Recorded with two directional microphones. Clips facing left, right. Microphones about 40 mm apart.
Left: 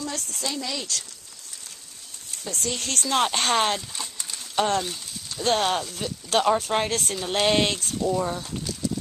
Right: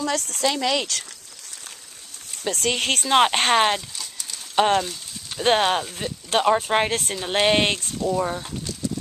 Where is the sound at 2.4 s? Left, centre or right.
Right.